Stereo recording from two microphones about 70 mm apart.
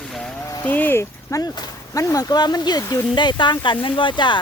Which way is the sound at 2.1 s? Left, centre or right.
Left.